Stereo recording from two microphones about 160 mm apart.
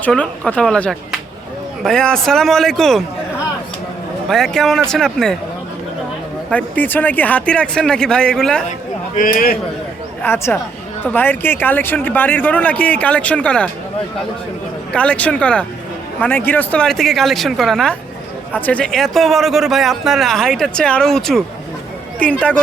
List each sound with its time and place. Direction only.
0.0 s a man's voice: 5° left (ahead or behind)
4.3 s a man's voice: centre (ahead or behind)
6.5 s speech: 10° left (ahead or behind)
9.1 s a man's voice: 60° left (ahead or behind)
10.2 s speech: 15° left (ahead or behind)
14.9 s a man's voice: 10° left (ahead or behind)